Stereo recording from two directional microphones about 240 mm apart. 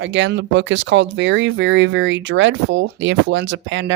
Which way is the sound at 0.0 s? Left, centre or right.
Right.